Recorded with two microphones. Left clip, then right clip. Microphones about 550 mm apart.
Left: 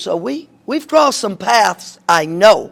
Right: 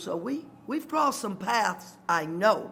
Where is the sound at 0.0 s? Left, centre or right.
Left.